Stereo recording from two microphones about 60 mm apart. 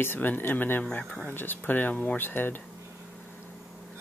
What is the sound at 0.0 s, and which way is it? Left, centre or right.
Speech, left.